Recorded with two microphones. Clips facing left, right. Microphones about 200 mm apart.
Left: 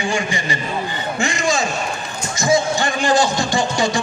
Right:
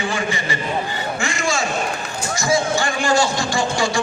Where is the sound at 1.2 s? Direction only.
20° left (ahead or behind).